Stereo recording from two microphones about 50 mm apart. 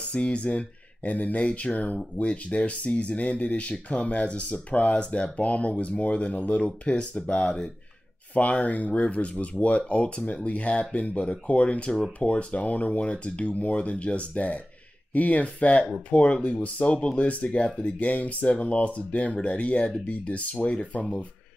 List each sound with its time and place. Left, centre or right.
0.1 s speech: left
8.4 s speech: left
11.9 s speech: centre
12.3 s speech: left